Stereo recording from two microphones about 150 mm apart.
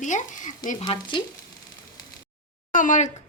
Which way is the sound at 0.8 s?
30° left (ahead or behind).